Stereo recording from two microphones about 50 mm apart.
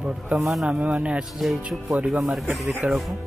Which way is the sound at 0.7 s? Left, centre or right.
Right.